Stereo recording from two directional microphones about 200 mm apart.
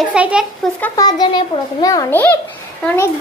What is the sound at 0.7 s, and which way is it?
Speech, 10° left (ahead or behind).